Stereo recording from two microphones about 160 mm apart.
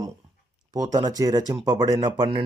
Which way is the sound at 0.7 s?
25° right (ahead or behind).